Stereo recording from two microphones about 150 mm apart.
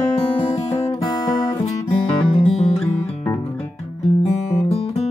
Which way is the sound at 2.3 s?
45° left (ahead or behind).